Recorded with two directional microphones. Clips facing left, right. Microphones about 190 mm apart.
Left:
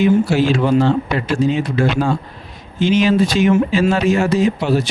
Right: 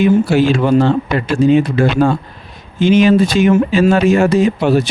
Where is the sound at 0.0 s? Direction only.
55° right (ahead or behind).